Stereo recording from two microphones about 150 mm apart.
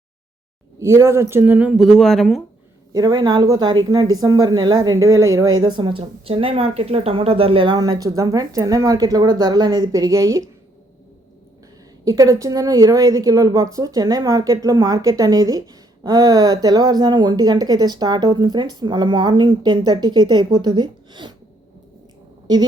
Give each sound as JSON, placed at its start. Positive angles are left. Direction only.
{"t": 0.8, "sound": "speech", "side_deg": -20}
{"t": 2.9, "sound": "a woman's voice", "side_deg": -25}
{"t": 12.0, "sound": "a woman's voice", "side_deg": -20}